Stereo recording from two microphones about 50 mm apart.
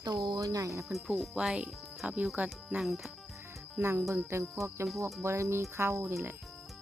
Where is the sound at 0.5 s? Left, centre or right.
Right.